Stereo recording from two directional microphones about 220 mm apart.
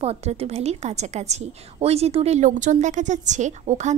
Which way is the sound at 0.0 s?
30° right (ahead or behind).